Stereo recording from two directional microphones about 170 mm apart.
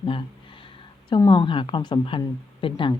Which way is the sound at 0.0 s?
30° left (ahead or behind).